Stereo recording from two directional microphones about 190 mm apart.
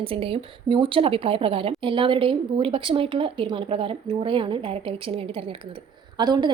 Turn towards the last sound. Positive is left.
turn(degrees=-20)  # may be behind; listen again after turning